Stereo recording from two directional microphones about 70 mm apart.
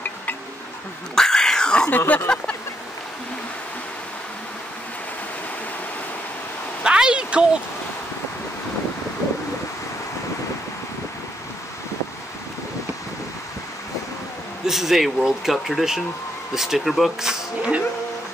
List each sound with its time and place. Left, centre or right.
1.1 s cat: centre
1.9 s speech: left
6.8 s a sound: centre
14.7 s speech: centre